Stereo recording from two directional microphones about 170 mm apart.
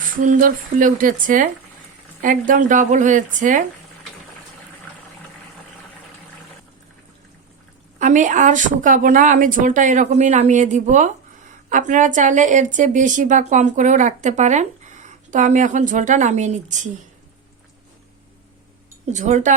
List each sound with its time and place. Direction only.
0.2 s a woman's voice: 50° right (ahead or behind)
7.9 s a woman's voice: 50° right (ahead or behind)
19.1 s a woman's voice: 45° right (ahead or behind)